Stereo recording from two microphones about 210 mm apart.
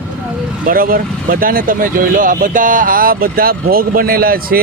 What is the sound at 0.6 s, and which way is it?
Speech, 45° right (ahead or behind).